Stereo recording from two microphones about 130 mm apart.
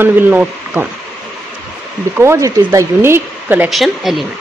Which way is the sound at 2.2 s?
20° right (ahead or behind).